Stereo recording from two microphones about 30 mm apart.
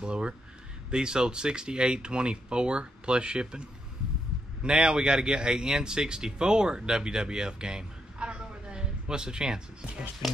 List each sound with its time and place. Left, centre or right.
0.0 s speech: right
4.6 s speech: right
8.4 s music: right